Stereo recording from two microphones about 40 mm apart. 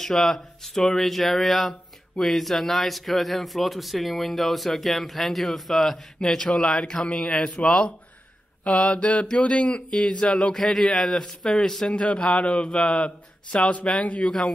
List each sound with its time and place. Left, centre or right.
0.0 s speech: centre
6.1 s speech: left
10.5 s speech: centre
11.9 s a man's voice: left